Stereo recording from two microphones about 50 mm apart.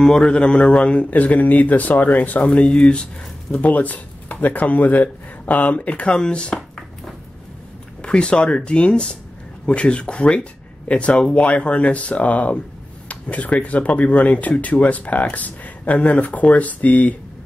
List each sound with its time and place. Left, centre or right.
0.0 s speech: centre
8.0 s speech: left